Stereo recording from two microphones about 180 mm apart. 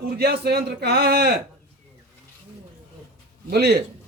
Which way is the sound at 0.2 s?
60° right (ahead or behind).